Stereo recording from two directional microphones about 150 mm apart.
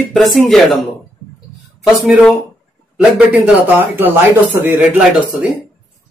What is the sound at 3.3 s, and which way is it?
Speech, 10° right (ahead or behind).